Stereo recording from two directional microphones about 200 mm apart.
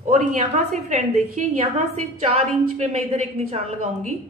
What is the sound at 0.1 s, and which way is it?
A woman's voice, 35° right (ahead or behind).